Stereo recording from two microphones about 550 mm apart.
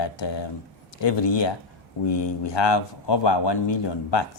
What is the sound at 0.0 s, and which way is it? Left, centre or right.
A man's voice, left.